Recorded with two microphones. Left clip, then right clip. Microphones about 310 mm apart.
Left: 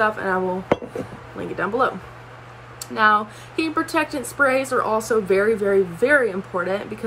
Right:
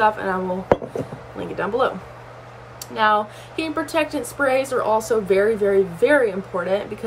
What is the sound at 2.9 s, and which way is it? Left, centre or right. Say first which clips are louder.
A woman's voice: left 1 dB; centre.